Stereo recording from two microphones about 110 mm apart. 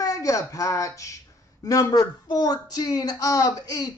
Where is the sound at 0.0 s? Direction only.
30° left (ahead or behind).